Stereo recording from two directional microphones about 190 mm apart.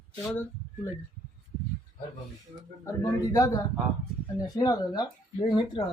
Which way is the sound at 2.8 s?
20° left (ahead or behind).